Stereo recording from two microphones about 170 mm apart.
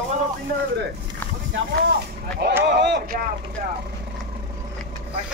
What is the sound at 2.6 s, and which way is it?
Speech, 85° right.